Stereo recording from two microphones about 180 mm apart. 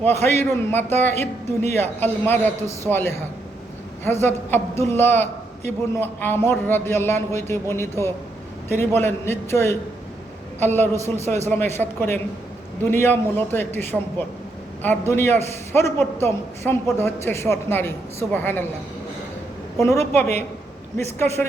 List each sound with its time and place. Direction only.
0.2 s a man's voice: 10° left (ahead or behind)
1.1 s a woman's voice: 35° right (ahead or behind)
1.7 s a man's voice: 10° left (ahead or behind)
19.8 s a man's voice: 15° left (ahead or behind)